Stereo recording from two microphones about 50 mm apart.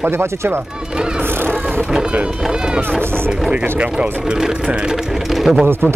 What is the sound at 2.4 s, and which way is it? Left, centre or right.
Speech, centre.